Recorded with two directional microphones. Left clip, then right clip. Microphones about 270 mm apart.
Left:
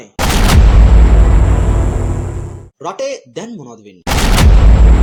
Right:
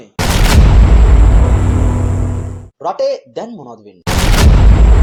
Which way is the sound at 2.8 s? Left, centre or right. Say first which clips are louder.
Right 5 dB; left.